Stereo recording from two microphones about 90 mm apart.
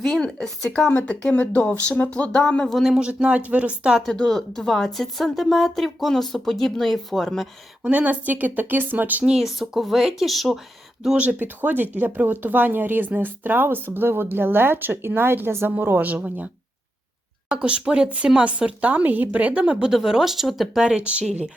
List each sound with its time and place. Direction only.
0.0 s speech: 5° left (ahead or behind)
0.9 s speech: 20° left (ahead or behind)
2.7 s a woman's voice: 5° right (ahead or behind)
4.0 s speech: 5° left (ahead or behind)
7.9 s speech: 15° right (ahead or behind)
9.2 s a woman's voice: 5° right (ahead or behind)
11.3 s speech: 20° right (ahead or behind)
17.5 s a woman's voice: 10° right (ahead or behind)